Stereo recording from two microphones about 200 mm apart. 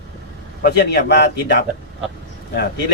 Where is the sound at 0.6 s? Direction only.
55° left (ahead or behind).